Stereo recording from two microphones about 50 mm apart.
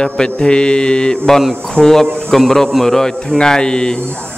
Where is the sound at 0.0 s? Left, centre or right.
Centre.